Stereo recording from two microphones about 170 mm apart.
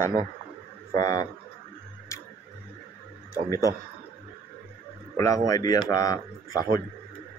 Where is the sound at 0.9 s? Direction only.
20° left (ahead or behind).